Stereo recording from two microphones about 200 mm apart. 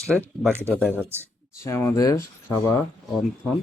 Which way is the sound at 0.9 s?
10° right (ahead or behind).